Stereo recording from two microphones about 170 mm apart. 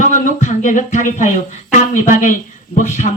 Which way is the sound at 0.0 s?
45° left (ahead or behind).